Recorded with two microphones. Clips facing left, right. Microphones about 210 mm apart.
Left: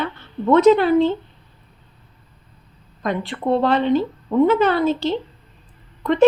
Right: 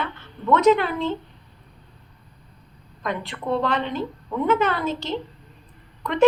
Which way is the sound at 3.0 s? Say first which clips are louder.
Left 5 dB; 35° left (ahead or behind).